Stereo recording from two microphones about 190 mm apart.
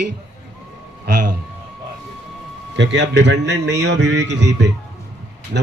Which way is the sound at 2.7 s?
70° right (ahead or behind).